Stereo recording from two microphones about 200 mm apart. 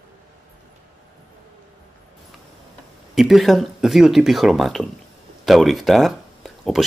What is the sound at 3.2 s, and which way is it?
Speech, centre (ahead or behind).